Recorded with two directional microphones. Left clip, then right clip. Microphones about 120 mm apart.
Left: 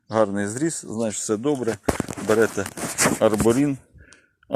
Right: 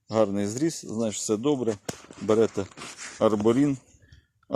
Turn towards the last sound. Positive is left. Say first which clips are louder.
# left 3 dB
turn(degrees=0)  # may be behind; listen again after turning